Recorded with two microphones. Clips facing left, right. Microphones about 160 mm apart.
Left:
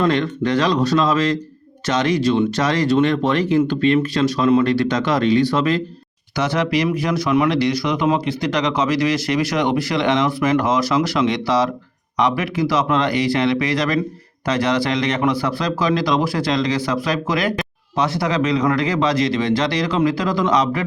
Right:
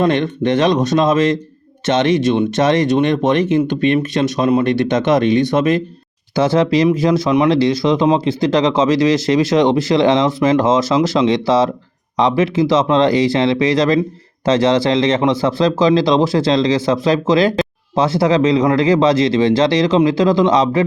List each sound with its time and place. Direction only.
0.0 s speech: 20° right (ahead or behind)